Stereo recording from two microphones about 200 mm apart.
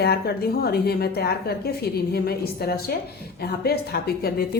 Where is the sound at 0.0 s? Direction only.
50° left (ahead or behind).